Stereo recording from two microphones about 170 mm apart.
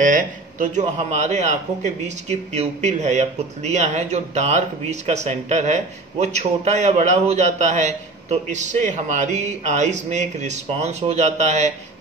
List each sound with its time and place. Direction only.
0.0 s a man's voice: 50° right (ahead or behind)